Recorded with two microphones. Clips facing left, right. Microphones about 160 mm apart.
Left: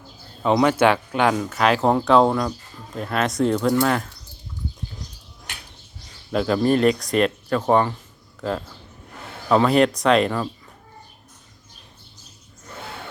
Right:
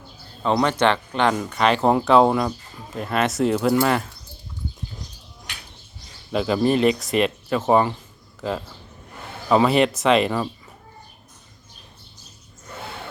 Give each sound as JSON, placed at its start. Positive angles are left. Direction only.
{"t": 0.4, "sound": "speech", "side_deg": 5}
{"t": 6.3, "sound": "speech", "side_deg": -5}